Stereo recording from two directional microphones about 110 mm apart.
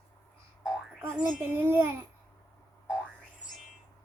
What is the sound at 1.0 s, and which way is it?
Speech, 20° right (ahead or behind).